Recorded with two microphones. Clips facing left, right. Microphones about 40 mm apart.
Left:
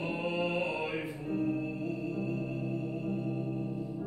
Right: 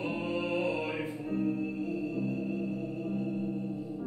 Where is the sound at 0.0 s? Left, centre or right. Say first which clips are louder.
Even; centre.